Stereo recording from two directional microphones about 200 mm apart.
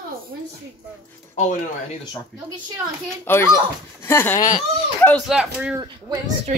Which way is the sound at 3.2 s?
10° left (ahead or behind).